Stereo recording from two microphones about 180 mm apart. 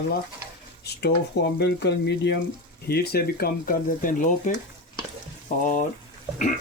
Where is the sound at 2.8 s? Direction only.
60° left (ahead or behind).